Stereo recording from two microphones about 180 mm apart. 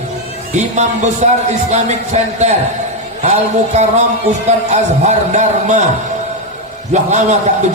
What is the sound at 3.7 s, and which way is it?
A man's voice, 40° right (ahead or behind).